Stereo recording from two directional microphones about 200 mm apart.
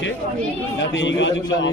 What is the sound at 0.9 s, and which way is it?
Speech, 65° left (ahead or behind).